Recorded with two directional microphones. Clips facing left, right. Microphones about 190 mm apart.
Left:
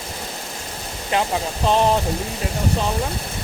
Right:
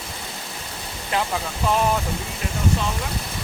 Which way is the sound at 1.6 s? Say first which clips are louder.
Left 3 dB; 25° left (ahead or behind).